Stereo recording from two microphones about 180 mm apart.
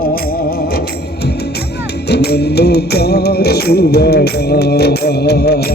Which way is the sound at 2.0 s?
65° left (ahead or behind).